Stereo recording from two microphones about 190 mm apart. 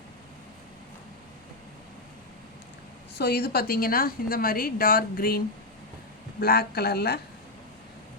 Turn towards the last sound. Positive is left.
turn(degrees=55)  # may be behind; listen again after turning